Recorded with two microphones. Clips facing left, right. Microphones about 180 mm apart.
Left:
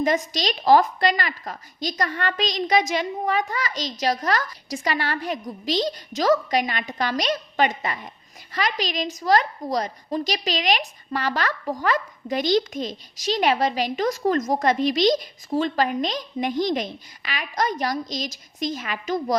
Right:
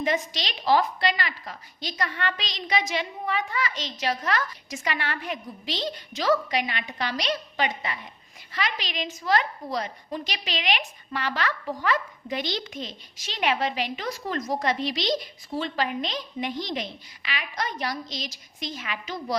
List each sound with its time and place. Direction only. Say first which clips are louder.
0.0 s a woman's voice: left 5 dB; 40° left (ahead or behind)